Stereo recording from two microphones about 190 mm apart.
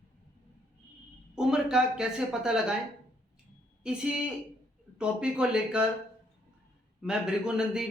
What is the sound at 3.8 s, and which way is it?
Speech, 5° right (ahead or behind).